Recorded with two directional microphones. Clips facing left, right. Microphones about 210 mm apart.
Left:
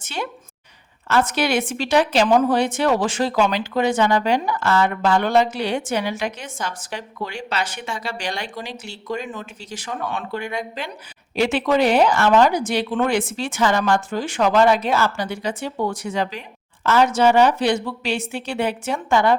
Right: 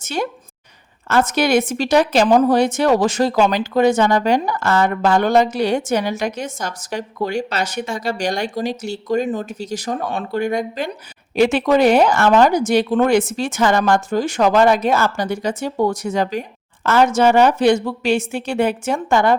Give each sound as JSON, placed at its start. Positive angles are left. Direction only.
{"t": 0.0, "sound": "a woman's voice", "side_deg": -40}